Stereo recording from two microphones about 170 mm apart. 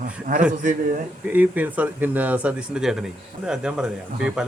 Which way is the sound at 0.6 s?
50° right (ahead or behind).